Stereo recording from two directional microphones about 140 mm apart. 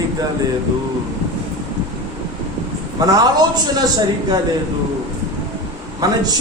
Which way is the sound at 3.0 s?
30° right (ahead or behind).